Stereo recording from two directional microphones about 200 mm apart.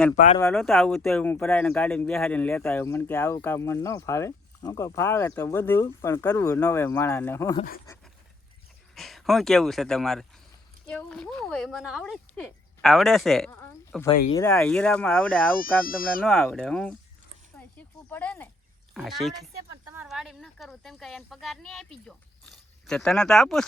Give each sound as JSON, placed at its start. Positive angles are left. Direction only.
{"t": 0.4, "sound": "speech", "side_deg": 0}
{"t": 7.9, "sound": "pant", "side_deg": 15}
{"t": 9.0, "sound": "speech", "side_deg": 0}
{"t": 13.5, "sound": "a sound", "side_deg": 10}
{"t": 14.5, "sound": "speech", "side_deg": 5}
{"t": 15.5, "sound": "speech", "side_deg": 45}
{"t": 16.2, "sound": "speech", "side_deg": 0}
{"t": 17.6, "sound": "a sound", "side_deg": 10}
{"t": 18.9, "sound": "speech", "side_deg": 0}